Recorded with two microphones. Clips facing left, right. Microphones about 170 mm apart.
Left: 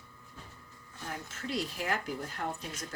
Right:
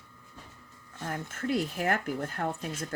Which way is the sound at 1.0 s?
55° right (ahead or behind).